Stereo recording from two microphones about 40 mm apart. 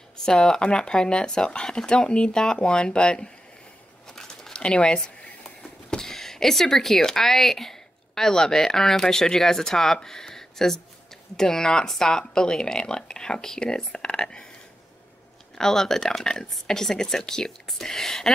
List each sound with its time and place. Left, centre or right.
0.2 s speech: centre
4.1 s crumpling: centre
4.6 s a sound: left
5.9 s speech: centre
15.5 s speech: centre